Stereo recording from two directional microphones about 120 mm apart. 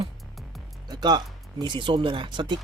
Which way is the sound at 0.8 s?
35° right (ahead or behind).